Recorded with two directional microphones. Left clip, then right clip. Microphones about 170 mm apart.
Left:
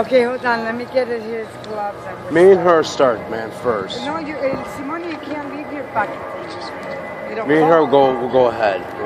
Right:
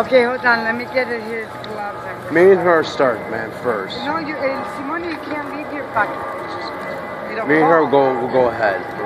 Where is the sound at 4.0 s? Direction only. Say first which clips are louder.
Right 1 dB; 45° left (ahead or behind).